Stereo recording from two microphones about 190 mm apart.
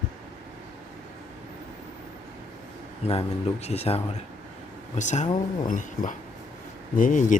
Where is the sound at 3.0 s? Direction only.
35° left (ahead or behind).